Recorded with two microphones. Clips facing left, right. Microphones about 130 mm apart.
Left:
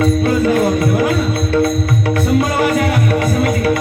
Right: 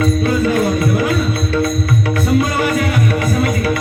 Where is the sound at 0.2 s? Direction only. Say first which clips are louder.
Left 2 dB; 45° left (ahead or behind).